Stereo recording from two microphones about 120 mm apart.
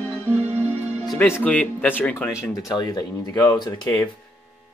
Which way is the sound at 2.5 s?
30° left (ahead or behind).